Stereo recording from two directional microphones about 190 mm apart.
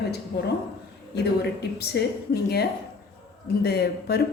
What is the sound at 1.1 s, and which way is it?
Speech, 60° left (ahead or behind).